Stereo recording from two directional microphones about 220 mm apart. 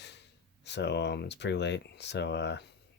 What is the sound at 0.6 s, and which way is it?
Speech, 50° left (ahead or behind).